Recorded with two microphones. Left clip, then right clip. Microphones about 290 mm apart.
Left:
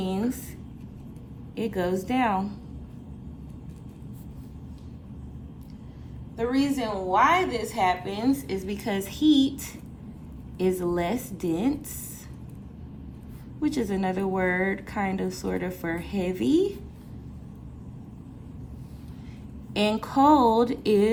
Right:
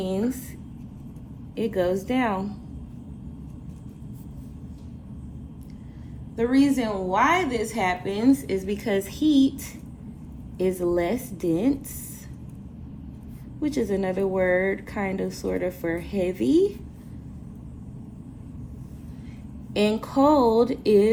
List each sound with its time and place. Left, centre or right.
0.0 s a sound: left
1.5 s a woman's voice: left
6.3 s a woman's voice: centre
10.7 s a woman's voice: left
13.7 s a woman's voice: left
19.7 s speech: left